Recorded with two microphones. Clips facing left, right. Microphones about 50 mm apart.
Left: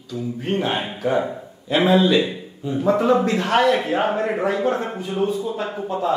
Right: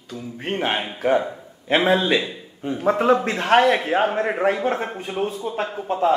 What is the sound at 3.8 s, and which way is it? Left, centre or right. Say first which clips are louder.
A man's voice: even; right.